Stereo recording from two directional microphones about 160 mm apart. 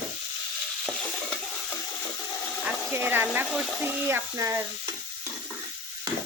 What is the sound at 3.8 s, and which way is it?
Frying, 10° right (ahead or behind).